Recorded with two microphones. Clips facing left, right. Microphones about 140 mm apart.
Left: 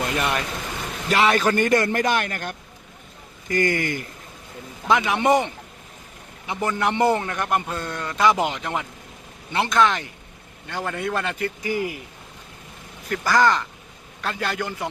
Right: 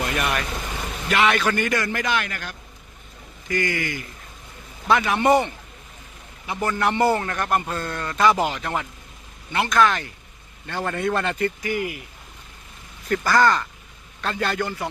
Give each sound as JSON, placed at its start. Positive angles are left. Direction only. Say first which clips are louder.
{"t": 0.2, "sound": "a man's voice", "louder": "left 1 dB", "side_deg": 25}
{"t": 4.9, "sound": "a man's voice", "louder": "right 1 dB", "side_deg": 15}
{"t": 6.5, "sound": "a man's voice", "louder": "even", "side_deg": 20}
{"t": 9.5, "sound": "a man's voice", "louder": "even", "side_deg": 25}
{"t": 11.6, "sound": "speech", "louder": "left 1 dB", "side_deg": 30}
{"t": 13.1, "sound": "a man's voice", "louder": "right 1 dB", "side_deg": 10}